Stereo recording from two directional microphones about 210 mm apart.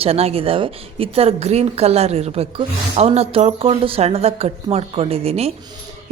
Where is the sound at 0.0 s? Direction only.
30° right (ahead or behind).